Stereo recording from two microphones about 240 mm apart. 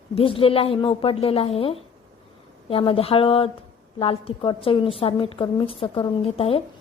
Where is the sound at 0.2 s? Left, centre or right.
Left.